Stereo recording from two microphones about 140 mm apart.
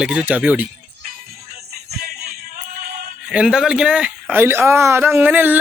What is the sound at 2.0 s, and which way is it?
Music, 90° right.